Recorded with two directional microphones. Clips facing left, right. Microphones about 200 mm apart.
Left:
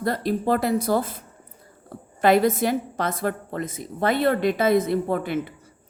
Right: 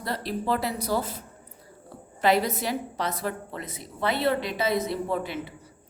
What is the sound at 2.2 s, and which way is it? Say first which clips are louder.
A woman's voice: left 5 dB; 50° left (ahead or behind).